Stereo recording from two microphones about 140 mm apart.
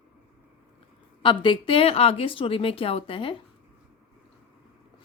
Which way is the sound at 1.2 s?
35° left (ahead or behind).